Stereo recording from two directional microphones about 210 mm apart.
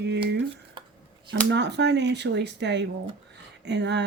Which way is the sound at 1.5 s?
55° right (ahead or behind).